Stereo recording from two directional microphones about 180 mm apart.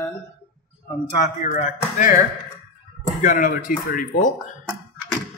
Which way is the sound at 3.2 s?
50° left (ahead or behind).